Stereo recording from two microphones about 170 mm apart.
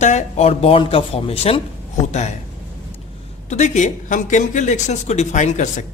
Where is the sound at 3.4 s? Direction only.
45° left (ahead or behind).